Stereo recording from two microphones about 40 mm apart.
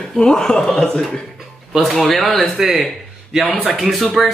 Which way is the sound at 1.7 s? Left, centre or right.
Centre.